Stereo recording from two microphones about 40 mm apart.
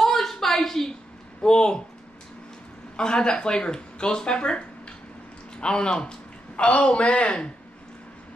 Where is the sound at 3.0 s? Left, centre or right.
Left.